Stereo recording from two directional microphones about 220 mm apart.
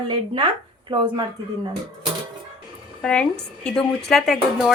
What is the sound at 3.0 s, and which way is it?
A woman's voice, 5° left (ahead or behind).